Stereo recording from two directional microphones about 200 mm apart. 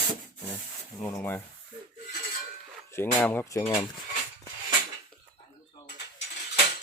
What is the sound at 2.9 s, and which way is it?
Speech, 10° left (ahead or behind).